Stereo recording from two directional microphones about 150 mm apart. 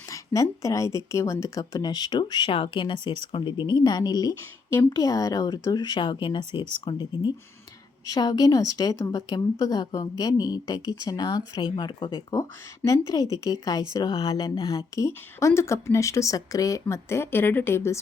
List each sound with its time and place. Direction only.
0.1 s a woman's voice: 20° left (ahead or behind)